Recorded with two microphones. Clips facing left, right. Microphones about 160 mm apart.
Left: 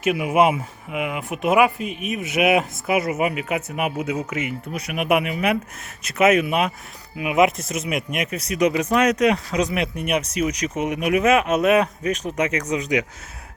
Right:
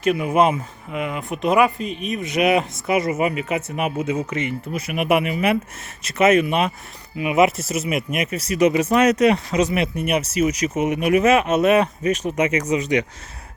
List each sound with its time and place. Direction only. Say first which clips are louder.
0.0 s speech: right 1 dB; 10° left (ahead or behind)